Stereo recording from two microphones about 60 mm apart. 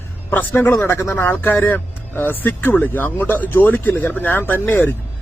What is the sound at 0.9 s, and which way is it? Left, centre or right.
A man's voice, left.